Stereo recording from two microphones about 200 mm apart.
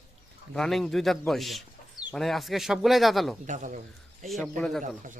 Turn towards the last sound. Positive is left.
turn(degrees=0)  # may be behind; listen again after turning